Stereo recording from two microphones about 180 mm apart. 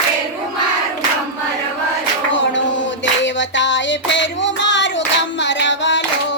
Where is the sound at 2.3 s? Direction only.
90° left.